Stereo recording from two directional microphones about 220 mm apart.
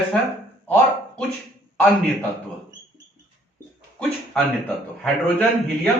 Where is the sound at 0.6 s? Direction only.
5° left (ahead or behind).